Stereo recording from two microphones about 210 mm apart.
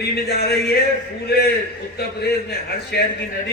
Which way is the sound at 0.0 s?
50° left (ahead or behind).